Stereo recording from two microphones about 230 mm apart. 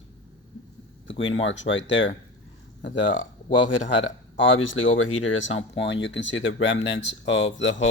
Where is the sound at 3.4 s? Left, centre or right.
Left.